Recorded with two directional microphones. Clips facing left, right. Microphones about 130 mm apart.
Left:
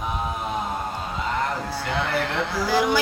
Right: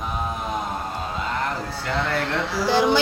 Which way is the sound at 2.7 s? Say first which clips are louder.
Right 3 dB; 30° right (ahead or behind).